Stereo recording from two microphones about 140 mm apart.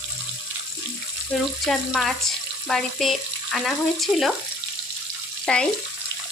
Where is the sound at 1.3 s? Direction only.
5° left (ahead or behind).